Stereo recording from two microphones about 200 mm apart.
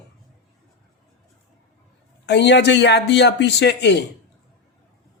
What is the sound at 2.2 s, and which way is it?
Speech, 60° left (ahead or behind).